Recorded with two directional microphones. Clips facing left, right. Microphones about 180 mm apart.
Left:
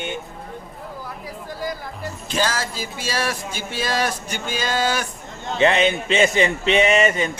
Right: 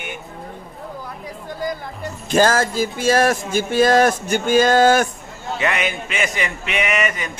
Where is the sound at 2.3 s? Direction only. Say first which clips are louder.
Right 8 dB; 50° right (ahead or behind).